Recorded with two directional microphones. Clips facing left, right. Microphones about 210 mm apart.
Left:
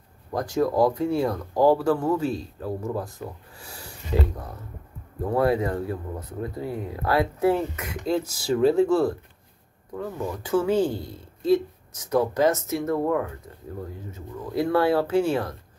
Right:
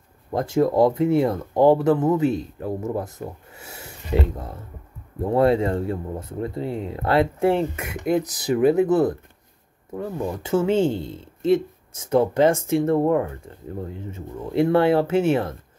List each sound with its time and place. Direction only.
0.3 s speech: 25° right (ahead or behind)